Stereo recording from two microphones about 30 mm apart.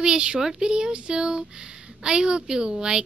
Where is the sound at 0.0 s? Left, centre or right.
Right.